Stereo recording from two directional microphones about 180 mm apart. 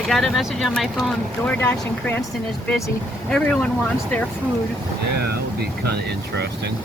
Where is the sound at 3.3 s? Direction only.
5° left (ahead or behind).